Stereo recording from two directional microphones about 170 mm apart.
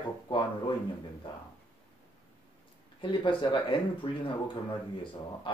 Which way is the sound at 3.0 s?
30° left (ahead or behind).